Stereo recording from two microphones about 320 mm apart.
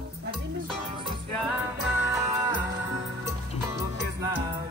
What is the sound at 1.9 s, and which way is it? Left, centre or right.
Music, centre.